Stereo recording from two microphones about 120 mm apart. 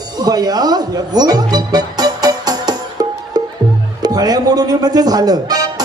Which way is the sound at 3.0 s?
35° right (ahead or behind).